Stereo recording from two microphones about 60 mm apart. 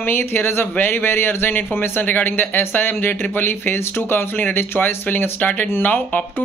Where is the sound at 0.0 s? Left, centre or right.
Left.